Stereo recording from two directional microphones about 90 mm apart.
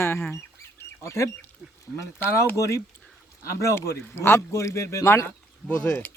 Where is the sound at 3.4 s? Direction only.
35° left (ahead or behind).